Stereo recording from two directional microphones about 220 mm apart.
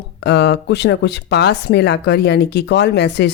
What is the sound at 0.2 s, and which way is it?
A woman's voice, 50° left (ahead or behind).